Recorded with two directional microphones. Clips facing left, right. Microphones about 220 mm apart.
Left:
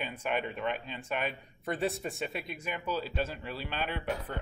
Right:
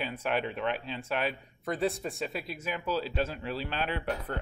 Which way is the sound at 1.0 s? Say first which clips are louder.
Right 2 dB; 5° right (ahead or behind).